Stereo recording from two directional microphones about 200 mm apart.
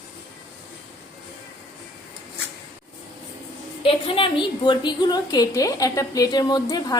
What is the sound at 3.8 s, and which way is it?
A woman's voice, 25° left (ahead or behind).